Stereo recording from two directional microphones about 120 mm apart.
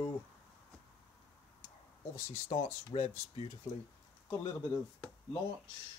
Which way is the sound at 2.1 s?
65° left (ahead or behind).